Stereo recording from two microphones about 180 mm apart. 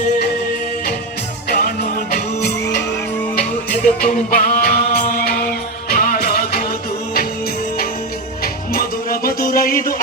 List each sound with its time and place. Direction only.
1.5 s music: 60° left (ahead or behind)
3.3 s music: 50° left (ahead or behind)
8.7 s music: 55° left (ahead or behind)